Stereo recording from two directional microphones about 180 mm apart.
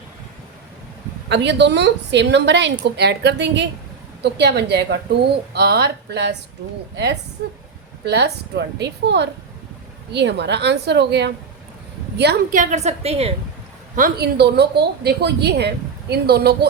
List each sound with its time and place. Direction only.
1.3 s a woman's voice: 70° right (ahead or behind)
12.5 s a woman's voice: 45° right (ahead or behind)
13.9 s a woman's voice: 55° right (ahead or behind)